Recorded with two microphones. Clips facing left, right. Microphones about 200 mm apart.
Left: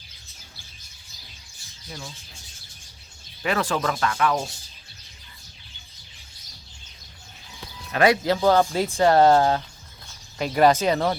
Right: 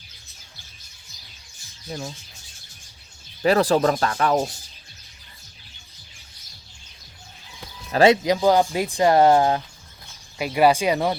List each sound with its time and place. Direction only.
1.9 s speech: 40° right (ahead or behind)
3.4 s speech: 35° right (ahead or behind)
7.9 s speech: 25° right (ahead or behind)